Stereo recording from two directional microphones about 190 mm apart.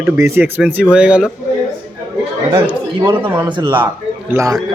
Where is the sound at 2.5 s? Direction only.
10° right (ahead or behind).